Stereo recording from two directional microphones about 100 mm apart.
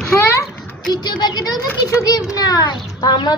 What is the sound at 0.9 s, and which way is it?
A child's voice, 45° left (ahead or behind).